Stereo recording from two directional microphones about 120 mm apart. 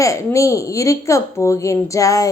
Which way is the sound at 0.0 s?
25° left (ahead or behind).